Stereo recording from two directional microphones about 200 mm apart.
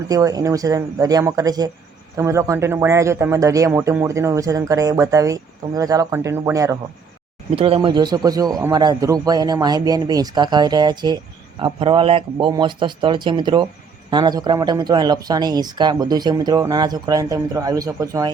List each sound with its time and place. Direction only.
0.1 s speech: 15° right (ahead or behind)
7.5 s speech: 30° right (ahead or behind)